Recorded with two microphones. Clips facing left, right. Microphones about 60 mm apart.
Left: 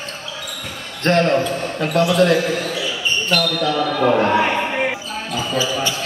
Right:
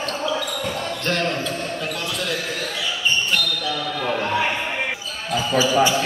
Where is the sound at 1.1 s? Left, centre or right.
Left.